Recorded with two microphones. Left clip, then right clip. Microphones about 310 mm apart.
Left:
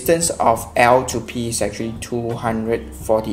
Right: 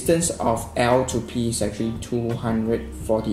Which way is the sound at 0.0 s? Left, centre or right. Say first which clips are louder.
Left 5 dB; left.